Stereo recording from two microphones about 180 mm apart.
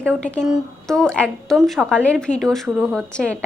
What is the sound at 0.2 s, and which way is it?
A woman's voice, 5° left (ahead or behind).